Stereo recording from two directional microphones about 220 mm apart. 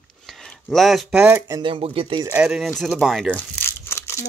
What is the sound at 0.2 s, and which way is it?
Speech, 5° left (ahead or behind).